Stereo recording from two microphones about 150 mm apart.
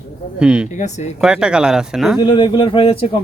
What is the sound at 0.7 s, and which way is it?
Speech, 50° left (ahead or behind).